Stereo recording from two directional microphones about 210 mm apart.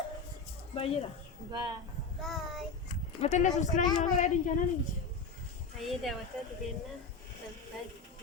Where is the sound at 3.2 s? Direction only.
35° left (ahead or behind).